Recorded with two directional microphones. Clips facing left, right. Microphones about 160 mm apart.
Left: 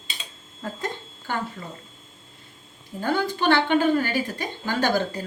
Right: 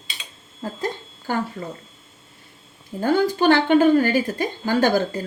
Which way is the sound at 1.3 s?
40° right (ahead or behind).